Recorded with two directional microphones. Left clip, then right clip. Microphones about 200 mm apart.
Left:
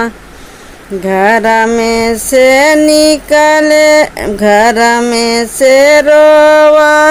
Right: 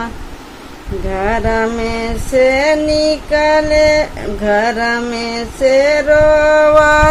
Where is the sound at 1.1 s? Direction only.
30° left (ahead or behind).